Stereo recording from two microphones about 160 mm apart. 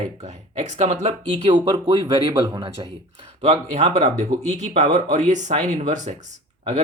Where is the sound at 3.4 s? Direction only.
40° right (ahead or behind).